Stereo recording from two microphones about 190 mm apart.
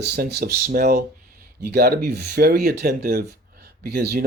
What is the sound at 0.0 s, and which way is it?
Speech, 55° right (ahead or behind).